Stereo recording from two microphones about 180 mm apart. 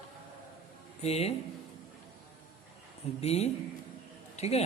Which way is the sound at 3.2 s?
35° left (ahead or behind).